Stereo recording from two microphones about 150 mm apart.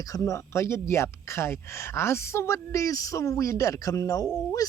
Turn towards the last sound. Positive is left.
turn(degrees=25)  # may be behind; listen again after turning